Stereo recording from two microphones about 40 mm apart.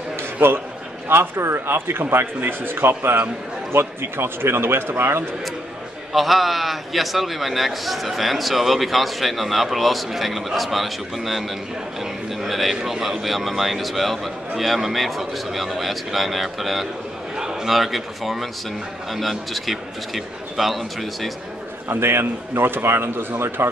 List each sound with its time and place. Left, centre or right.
0.4 s a man's voice: right
1.0 s a man's voice: right
6.1 s a man's voice: centre
21.8 s a man's voice: right